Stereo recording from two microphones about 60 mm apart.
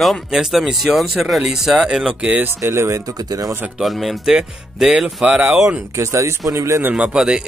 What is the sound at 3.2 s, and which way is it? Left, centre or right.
Speech, right.